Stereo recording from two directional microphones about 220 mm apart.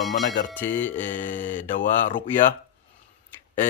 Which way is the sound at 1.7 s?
40° left (ahead or behind).